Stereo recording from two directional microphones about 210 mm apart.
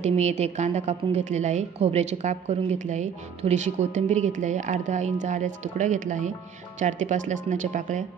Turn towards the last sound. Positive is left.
turn(degrees=-35)  # may be behind; listen again after turning